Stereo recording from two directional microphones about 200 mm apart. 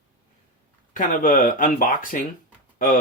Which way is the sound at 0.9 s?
40° left (ahead or behind).